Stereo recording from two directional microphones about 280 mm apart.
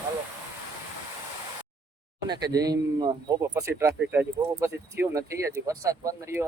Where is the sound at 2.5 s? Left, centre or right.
Centre.